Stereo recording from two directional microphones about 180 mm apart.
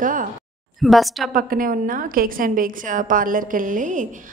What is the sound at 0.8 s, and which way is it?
Speech, centre (ahead or behind).